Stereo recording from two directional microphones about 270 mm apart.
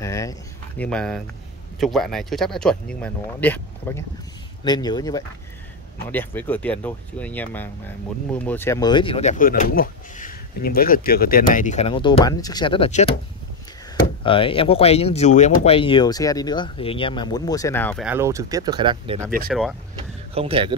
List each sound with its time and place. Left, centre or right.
0.0 s speech: centre
14.2 s speech: centre
18.0 s speech: centre
20.3 s a man's voice: centre